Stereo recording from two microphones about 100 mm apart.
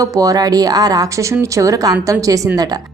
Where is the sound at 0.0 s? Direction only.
35° right (ahead or behind).